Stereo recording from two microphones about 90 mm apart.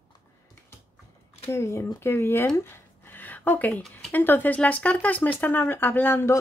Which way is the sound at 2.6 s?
25° left (ahead or behind).